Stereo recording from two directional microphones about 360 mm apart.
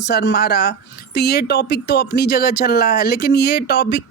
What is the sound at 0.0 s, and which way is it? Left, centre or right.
A woman's voice, left.